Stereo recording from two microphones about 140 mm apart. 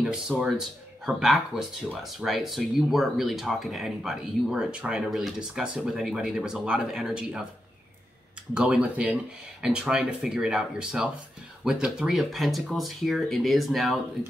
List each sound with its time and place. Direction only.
0.0 s speech: 5° right (ahead or behind)
8.5 s speech: 5° right (ahead or behind)